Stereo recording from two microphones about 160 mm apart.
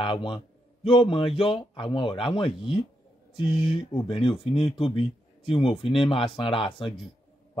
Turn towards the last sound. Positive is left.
turn(degrees=35)  # may be behind; listen again after turning